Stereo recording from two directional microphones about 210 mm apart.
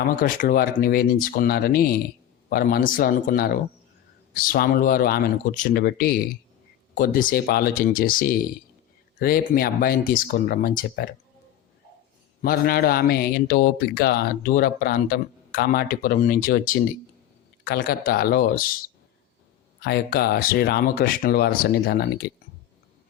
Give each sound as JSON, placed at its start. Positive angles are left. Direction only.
{"t": 0.2, "sound": "a man's voice", "side_deg": 40}
{"t": 12.4, "sound": "a man's voice", "side_deg": 45}
{"t": 19.8, "sound": "a man's voice", "side_deg": 50}